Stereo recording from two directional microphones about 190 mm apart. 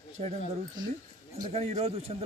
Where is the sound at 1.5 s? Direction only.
35° right (ahead or behind).